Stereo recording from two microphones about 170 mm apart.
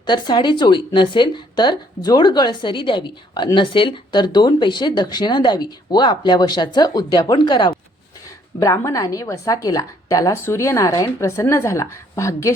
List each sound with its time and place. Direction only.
0.0 s a woman's voice: 25° left (ahead or behind)